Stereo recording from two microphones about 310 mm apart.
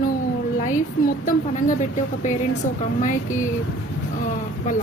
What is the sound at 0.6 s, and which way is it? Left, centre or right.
A woman's voice, left.